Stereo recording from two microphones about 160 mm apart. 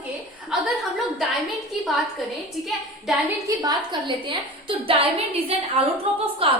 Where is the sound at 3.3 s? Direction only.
20° right (ahead or behind).